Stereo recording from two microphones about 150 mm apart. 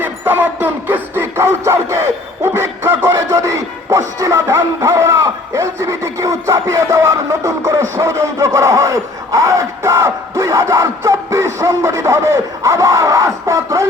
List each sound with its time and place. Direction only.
0.0 s music: 10° right (ahead or behind)